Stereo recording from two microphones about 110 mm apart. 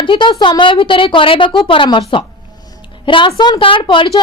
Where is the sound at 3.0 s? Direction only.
50° left (ahead or behind).